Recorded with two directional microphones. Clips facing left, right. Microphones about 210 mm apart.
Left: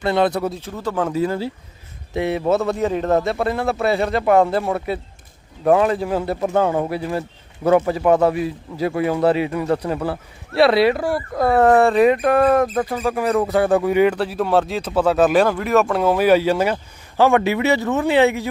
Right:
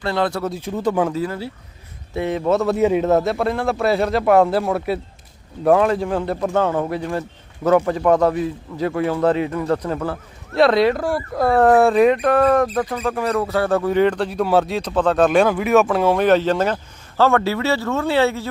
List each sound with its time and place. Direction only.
0.0 s speech: 20° left (ahead or behind)
0.6 s speech: 20° right (ahead or behind)
2.1 s a man's voice: 10° left (ahead or behind)